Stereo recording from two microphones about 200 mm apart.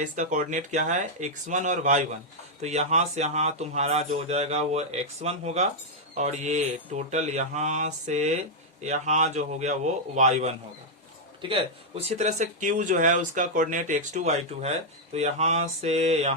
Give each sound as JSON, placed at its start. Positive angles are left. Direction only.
{"t": 0.0, "sound": "a man's voice", "side_deg": -40}